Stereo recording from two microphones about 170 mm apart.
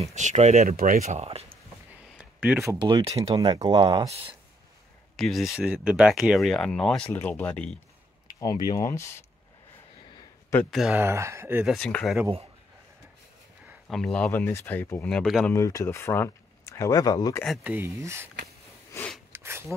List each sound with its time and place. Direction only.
0.0 s speech: 45° right (ahead or behind)
0.7 s speech: 55° right (ahead or behind); by 1.6 s 35° right (ahead or behind)
2.0 s a sound: 5° right (ahead or behind)
2.7 s speech: 25° right (ahead or behind)
5.1 s speech: centre (ahead or behind)
8.3 s speech: 20° left (ahead or behind)
10.7 s speech: centre (ahead or behind)
11.0 s speech: 15° right (ahead or behind)
11.6 s speech: 5° left (ahead or behind)
13.8 s speech: centre (ahead or behind)
15.5 s speech: 15° left (ahead or behind)
17.6 s speech: 15° right (ahead or behind)
18.9 s a sound: 5° left (ahead or behind)
19.3 s a sound: 15° right (ahead or behind)